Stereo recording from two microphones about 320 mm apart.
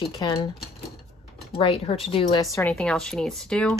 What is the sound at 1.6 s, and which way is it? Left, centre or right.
Speech, centre.